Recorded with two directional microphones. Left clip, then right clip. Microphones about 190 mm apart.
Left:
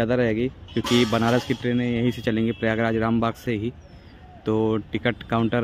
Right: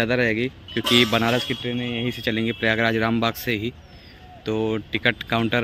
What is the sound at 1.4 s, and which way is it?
Speech, 25° left (ahead or behind).